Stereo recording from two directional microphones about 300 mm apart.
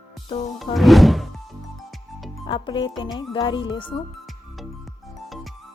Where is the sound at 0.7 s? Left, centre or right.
Centre.